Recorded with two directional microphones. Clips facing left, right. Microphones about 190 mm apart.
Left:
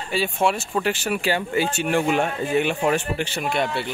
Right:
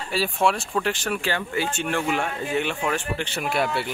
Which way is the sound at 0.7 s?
5° left (ahead or behind).